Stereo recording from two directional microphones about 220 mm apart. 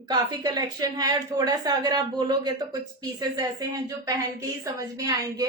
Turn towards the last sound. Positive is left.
turn(degrees=-15)  # may be behind; listen again after turning